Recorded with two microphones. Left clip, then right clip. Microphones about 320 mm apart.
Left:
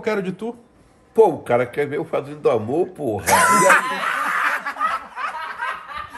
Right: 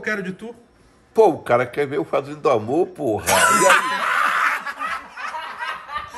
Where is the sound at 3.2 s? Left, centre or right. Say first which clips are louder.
Left 1 dB; centre.